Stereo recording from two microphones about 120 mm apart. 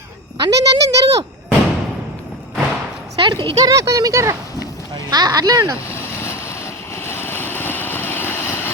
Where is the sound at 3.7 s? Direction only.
25° right (ahead or behind).